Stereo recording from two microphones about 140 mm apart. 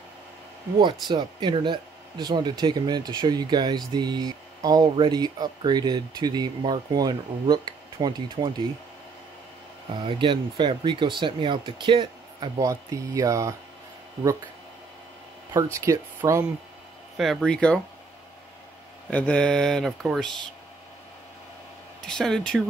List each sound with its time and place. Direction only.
1.0 s speech: 35° right (ahead or behind)
10.0 s speech: 35° right (ahead or behind)
15.5 s speech: 20° right (ahead or behind)
17.2 s speech: centre (ahead or behind)
19.0 s speech: 10° left (ahead or behind)
22.0 s speech: 5° left (ahead or behind)